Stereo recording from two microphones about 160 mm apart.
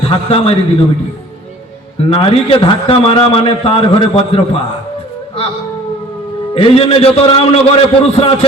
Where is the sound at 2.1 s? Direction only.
35° left (ahead or behind).